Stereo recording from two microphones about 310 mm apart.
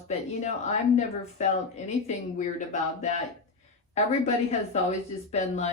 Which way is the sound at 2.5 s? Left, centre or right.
Left.